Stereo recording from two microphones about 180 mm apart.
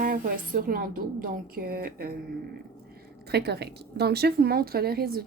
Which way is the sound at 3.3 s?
65° right (ahead or behind).